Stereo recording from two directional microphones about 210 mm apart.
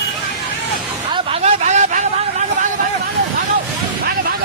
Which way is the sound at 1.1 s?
30° right (ahead or behind).